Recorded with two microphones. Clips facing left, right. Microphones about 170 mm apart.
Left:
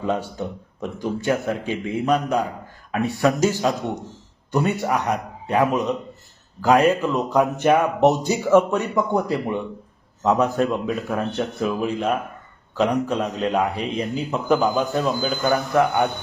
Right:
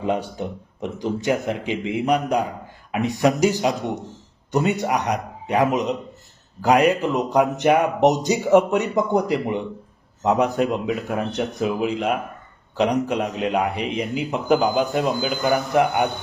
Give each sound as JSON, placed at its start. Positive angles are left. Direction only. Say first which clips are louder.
{"t": 0.0, "sound": "speech", "louder": "right 1 dB", "side_deg": -15}